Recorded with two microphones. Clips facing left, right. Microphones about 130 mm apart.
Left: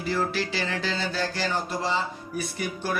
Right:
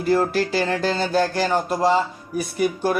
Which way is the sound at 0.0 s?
50° right (ahead or behind).